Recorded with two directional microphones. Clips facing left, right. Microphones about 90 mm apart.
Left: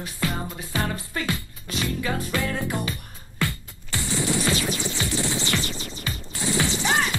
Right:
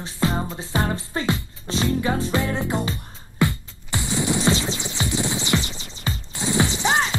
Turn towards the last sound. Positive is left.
turn(degrees=-20)  # may be behind; listen again after turning